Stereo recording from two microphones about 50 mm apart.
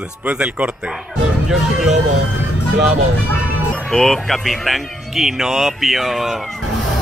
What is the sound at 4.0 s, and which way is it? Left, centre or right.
Speech, centre.